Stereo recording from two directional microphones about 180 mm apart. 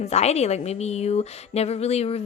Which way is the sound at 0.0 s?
35° left (ahead or behind).